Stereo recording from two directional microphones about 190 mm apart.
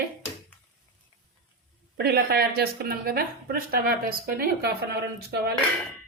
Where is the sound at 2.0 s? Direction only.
60° right (ahead or behind).